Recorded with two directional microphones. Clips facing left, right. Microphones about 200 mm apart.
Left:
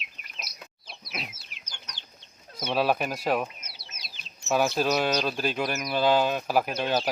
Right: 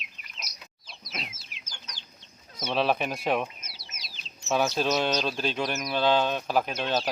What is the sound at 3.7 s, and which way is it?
Bird, 55° left (ahead or behind).